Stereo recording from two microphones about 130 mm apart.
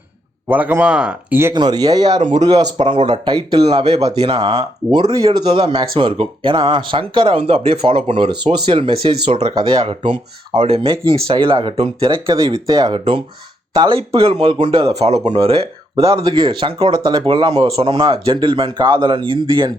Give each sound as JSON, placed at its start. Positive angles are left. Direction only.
{"t": 0.4, "sound": "a man's voice", "side_deg": -15}
{"t": 1.5, "sound": "speech", "side_deg": -30}
{"t": 2.1, "sound": "speech", "side_deg": -65}
{"t": 2.4, "sound": "speech", "side_deg": -30}
{"t": 5.6, "sound": "speech", "side_deg": -45}
{"t": 15.2, "sound": "speech", "side_deg": -35}
{"t": 15.4, "sound": "speech", "side_deg": -45}